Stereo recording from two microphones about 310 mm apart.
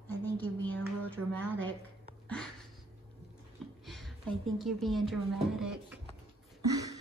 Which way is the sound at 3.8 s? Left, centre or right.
Centre.